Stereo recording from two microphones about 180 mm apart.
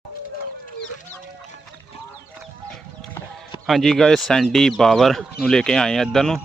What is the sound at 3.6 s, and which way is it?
Speech, centre (ahead or behind).